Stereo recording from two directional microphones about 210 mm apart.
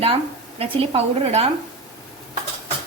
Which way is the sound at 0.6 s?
30° right (ahead or behind).